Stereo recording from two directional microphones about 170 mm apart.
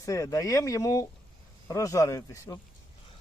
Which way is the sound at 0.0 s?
20° left (ahead or behind).